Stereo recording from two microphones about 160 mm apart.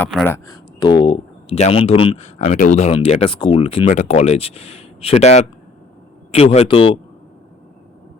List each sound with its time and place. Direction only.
0.3 s speech: 25° left (ahead or behind)
2.4 s speech: 55° left (ahead or behind); by 7.0 s 35° left (ahead or behind)